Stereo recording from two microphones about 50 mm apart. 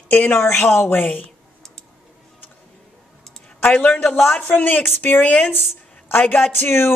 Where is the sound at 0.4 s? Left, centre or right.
Left.